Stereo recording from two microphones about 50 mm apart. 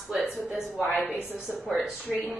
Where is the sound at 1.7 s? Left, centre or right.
Centre.